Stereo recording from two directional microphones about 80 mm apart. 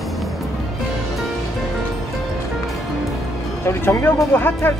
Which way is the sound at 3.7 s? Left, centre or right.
Left.